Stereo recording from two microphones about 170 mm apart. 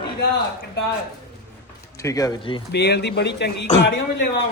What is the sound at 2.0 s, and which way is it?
Speech, 20° left (ahead or behind).